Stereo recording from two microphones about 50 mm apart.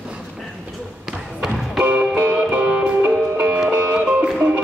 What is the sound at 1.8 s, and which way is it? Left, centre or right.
Music, right.